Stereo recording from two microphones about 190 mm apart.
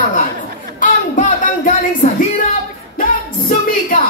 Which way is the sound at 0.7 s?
45° left (ahead or behind).